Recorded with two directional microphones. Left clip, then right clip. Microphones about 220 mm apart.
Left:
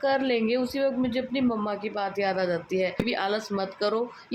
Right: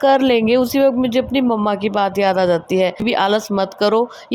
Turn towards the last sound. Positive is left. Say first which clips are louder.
# right 11 dB
turn(degrees=-35)  # may be behind; listen again after turning